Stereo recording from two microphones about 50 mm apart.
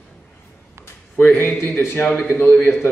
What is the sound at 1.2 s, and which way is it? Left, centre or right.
Speech, left.